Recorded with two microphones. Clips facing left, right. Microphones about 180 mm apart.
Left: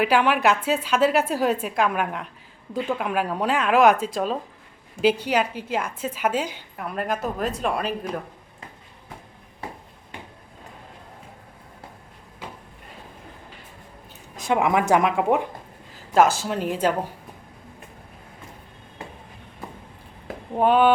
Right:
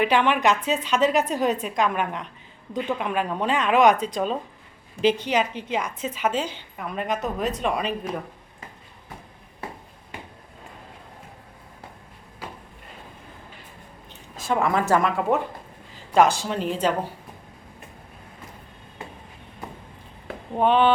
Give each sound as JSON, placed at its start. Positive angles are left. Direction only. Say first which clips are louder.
{"t": 0.0, "sound": "a woman's voice", "louder": "left 1 dB", "side_deg": 5}
{"t": 14.3, "sound": "a woman's voice", "louder": "left 2 dB", "side_deg": 20}
{"t": 16.1, "sound": "a woman's voice", "louder": "even", "side_deg": 5}
{"t": 20.5, "sound": "a woman's voice", "louder": "left 1 dB", "side_deg": 5}